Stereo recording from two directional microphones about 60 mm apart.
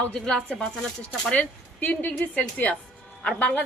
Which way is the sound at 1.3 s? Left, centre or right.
Left.